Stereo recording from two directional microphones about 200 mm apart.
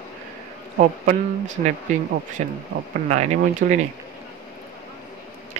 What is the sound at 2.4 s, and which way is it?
Speech, 40° right (ahead or behind).